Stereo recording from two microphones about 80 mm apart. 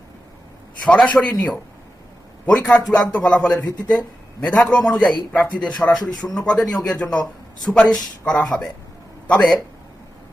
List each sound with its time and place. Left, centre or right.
0.9 s a man's voice: centre
2.5 s a man's voice: centre
6.0 s speech: left
6.3 s a man's voice: centre
7.6 s a man's voice: centre